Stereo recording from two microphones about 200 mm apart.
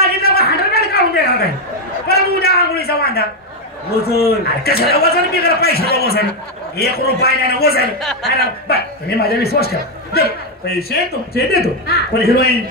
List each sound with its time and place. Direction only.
0.0 s a sound: 50° left (ahead or behind)
4.0 s a man's voice: 50° left (ahead or behind)
8.0 s a man's voice: centre (ahead or behind)
8.4 s a man's voice: 50° left (ahead or behind)